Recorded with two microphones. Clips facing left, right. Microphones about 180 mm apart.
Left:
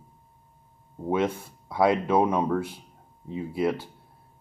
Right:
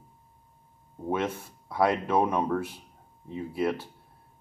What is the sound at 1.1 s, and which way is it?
Speech, 10° left (ahead or behind).